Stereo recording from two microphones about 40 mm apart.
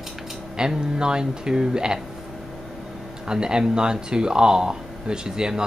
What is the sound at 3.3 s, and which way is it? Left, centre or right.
Speech, centre.